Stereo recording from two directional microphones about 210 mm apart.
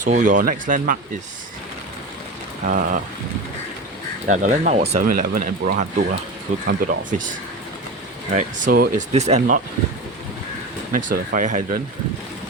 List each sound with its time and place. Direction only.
0.0 s speech: 35° right (ahead or behind)
2.6 s speech: 40° right (ahead or behind)
4.3 s speech: 35° right (ahead or behind)
10.9 s speech: 40° right (ahead or behind)